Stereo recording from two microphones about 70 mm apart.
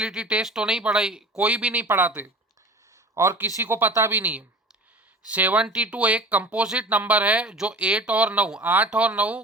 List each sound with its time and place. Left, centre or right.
0.0 s speech: centre; by 2.3 s right
3.3 s speech: right